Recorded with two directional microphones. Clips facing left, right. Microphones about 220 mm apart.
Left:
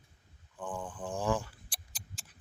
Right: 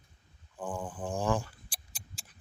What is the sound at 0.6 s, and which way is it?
Mantra, 40° right (ahead or behind).